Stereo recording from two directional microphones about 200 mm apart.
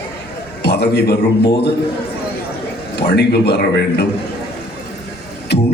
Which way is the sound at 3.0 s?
55° left (ahead or behind).